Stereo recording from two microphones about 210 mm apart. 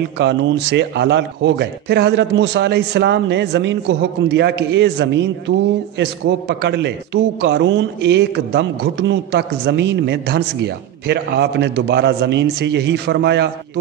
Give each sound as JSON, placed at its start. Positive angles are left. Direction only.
{"t": 0.2, "sound": "a man's voice", "side_deg": -55}